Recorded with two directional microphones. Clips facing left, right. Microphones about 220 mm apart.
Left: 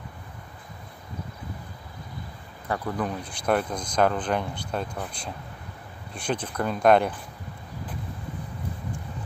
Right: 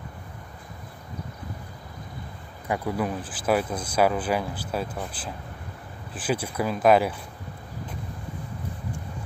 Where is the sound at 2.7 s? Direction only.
10° right (ahead or behind).